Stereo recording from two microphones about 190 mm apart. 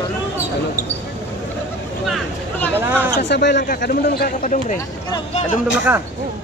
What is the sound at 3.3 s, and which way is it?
Speech, 65° left (ahead or behind).